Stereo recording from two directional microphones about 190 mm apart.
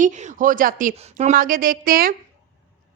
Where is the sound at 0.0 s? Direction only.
40° right (ahead or behind).